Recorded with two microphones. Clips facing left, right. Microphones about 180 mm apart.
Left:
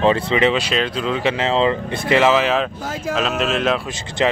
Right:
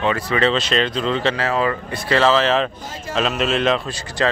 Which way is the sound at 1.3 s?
25° left (ahead or behind).